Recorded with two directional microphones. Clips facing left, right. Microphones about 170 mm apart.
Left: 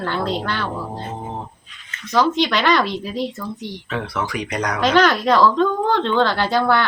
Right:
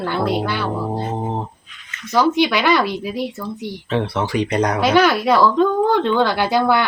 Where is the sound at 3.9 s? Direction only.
30° right (ahead or behind).